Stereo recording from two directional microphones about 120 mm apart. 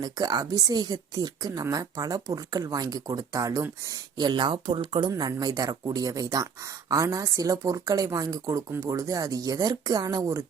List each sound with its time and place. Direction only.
0.0 s speech: 35° right (ahead or behind)